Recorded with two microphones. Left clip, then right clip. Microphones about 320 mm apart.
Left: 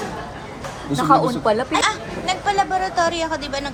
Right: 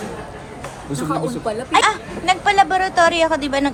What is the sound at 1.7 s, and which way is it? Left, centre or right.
A woman's voice, right.